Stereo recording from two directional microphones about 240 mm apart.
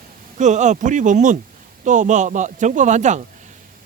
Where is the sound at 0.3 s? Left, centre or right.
Right.